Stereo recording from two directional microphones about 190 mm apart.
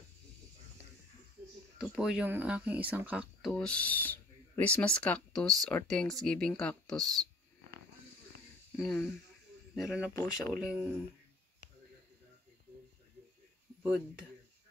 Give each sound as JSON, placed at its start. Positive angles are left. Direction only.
{"t": 1.8, "sound": "speech", "side_deg": -5}
{"t": 3.5, "sound": "speech", "side_deg": 5}
{"t": 8.7, "sound": "speech", "side_deg": 0}